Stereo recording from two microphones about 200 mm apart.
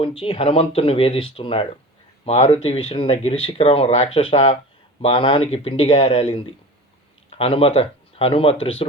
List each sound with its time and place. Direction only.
0.0 s speech: 25° left (ahead or behind)